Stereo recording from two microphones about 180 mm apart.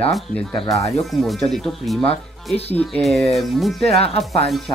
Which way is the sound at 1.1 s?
Centre (ahead or behind).